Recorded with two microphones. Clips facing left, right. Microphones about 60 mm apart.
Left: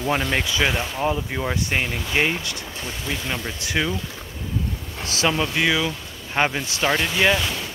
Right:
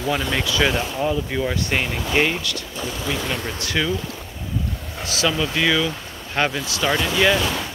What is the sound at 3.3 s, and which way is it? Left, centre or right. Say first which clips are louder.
Speech: right 1 dB; centre.